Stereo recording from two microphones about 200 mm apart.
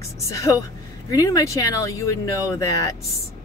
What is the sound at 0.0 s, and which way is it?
Speech, 15° left (ahead or behind).